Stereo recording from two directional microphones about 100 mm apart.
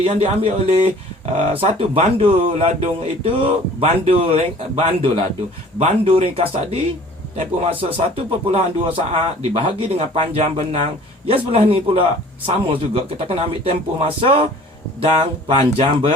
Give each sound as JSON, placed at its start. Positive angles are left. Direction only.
{"t": 0.0, "sound": "speech", "side_deg": -80}
{"t": 1.2, "sound": "speech", "side_deg": -90}
{"t": 5.8, "sound": "speech", "side_deg": -90}
{"t": 11.3, "sound": "speech", "side_deg": -75}